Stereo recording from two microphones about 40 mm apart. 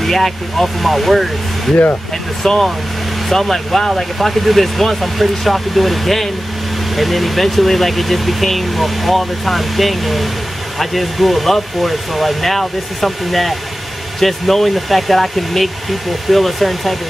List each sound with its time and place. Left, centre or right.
0.0 s speech: centre
2.4 s speech: centre